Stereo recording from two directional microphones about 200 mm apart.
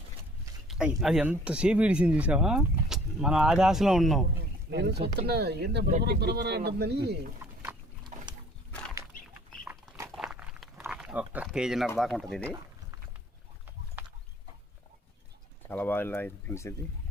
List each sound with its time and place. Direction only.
0.7 s speech: 5° right (ahead or behind)
4.7 s speech: 55° right (ahead or behind)
8.0 s a sound: 20° right (ahead or behind)
10.1 s a sound: 5° right (ahead or behind)
11.9 s speech: centre (ahead or behind)
14.0 s clip-clop: 10° right (ahead or behind)
15.7 s speech: 10° left (ahead or behind)